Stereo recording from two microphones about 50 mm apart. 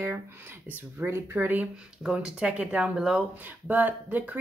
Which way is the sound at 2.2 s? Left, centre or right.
Centre.